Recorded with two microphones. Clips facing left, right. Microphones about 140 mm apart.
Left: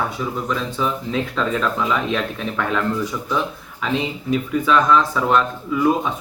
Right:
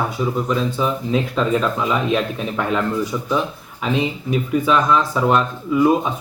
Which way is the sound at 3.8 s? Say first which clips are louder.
Right 1 dB; 10° right (ahead or behind).